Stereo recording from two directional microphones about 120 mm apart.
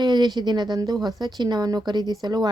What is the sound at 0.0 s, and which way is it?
Speech, 35° right (ahead or behind).